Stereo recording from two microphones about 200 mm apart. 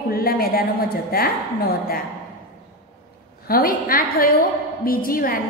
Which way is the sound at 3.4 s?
45° left (ahead or behind).